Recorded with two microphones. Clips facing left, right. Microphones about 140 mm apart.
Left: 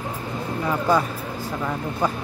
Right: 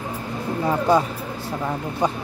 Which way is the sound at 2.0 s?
20° right (ahead or behind).